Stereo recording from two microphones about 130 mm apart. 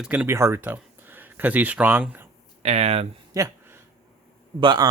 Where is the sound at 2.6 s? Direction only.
55° right (ahead or behind).